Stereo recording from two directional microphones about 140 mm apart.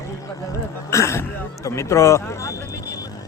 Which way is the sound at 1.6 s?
20° left (ahead or behind).